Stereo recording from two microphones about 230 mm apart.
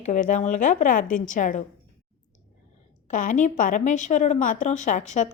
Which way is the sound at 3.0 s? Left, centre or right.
Left.